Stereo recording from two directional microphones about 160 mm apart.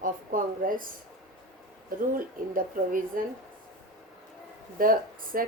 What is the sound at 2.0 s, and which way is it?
Speech, 60° right (ahead or behind).